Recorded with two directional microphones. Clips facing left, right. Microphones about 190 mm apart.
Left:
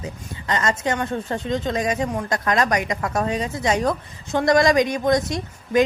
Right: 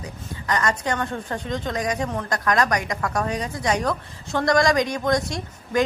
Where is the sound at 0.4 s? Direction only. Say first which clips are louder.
Left 1 dB; 25° left (ahead or behind).